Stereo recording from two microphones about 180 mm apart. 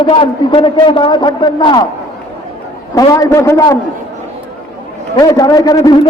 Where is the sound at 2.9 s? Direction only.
20° left (ahead or behind).